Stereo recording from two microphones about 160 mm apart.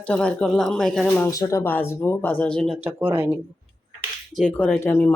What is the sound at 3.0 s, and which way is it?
Speech, 10° right (ahead or behind).